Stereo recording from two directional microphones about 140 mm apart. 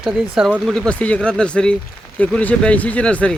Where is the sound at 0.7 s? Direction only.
5° left (ahead or behind).